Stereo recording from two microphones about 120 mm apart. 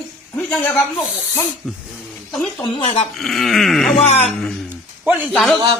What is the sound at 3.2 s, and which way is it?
Speech, centre (ahead or behind).